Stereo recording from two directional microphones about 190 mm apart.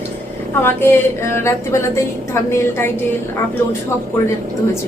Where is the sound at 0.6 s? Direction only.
10° left (ahead or behind).